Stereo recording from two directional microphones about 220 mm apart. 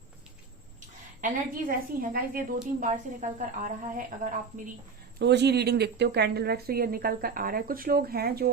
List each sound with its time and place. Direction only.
1.2 s a woman's voice: 35° right (ahead or behind)
5.2 s speech: 50° right (ahead or behind)